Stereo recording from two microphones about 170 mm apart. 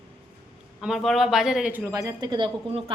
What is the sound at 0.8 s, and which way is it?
A woman's voice, centre (ahead or behind).